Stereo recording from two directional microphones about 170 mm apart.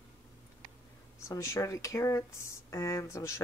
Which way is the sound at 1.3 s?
20° left (ahead or behind).